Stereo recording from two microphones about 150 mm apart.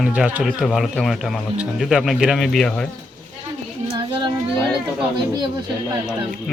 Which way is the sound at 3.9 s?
35° right (ahead or behind).